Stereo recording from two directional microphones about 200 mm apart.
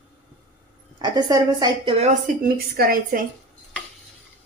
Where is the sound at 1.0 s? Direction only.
20° right (ahead or behind).